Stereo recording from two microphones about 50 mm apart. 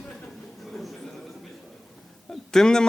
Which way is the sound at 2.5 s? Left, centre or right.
Centre.